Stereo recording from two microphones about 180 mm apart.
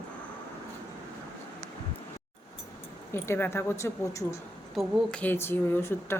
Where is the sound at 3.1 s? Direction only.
15° left (ahead or behind).